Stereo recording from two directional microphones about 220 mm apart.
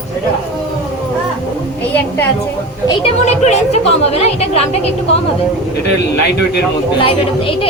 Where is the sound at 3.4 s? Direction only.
30° left (ahead or behind).